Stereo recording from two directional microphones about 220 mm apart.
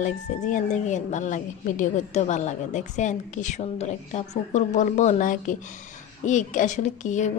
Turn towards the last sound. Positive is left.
turn(degrees=35)  # may be behind; listen again after turning